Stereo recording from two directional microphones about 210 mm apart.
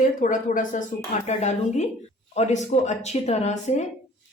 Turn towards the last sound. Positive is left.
turn(degrees=35)  # may be behind; listen again after turning